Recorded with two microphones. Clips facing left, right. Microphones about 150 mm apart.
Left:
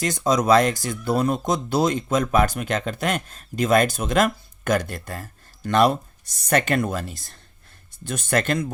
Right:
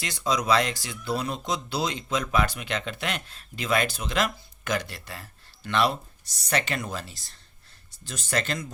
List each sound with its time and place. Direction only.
0.0 s speech: 45° left (ahead or behind)